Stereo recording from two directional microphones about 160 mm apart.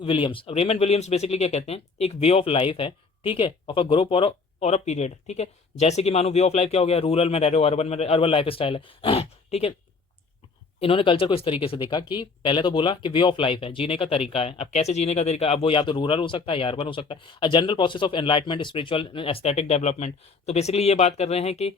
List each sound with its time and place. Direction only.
0.0 s speech: 35° left (ahead or behind)
10.8 s speech: 35° left (ahead or behind)